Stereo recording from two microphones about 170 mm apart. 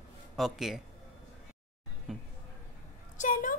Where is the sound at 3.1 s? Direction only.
50° left (ahead or behind).